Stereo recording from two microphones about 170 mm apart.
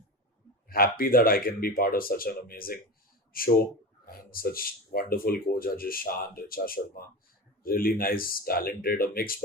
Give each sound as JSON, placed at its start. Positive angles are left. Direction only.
{"t": 0.7, "sound": "speech", "side_deg": 60}